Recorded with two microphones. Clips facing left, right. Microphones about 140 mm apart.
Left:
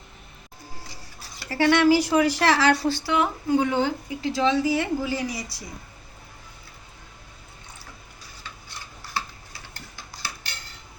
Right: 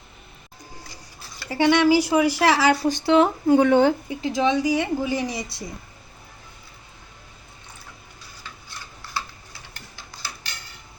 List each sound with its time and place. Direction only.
1.5 s a woman's voice: 15° right (ahead or behind)
3.5 s speech: 60° right (ahead or behind)
4.1 s a woman's voice: 20° right (ahead or behind)